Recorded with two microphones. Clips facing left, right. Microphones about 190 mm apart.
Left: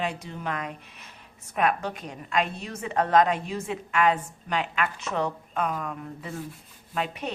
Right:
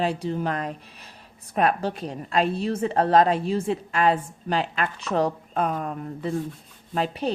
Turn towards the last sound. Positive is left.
turn(degrees=-35)  # may be behind; listen again after turning